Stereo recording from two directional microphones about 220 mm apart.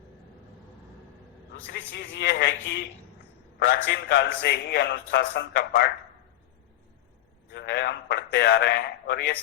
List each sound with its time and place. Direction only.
1.6 s a man's voice: 55° left (ahead or behind)
7.5 s a man's voice: 50° left (ahead or behind)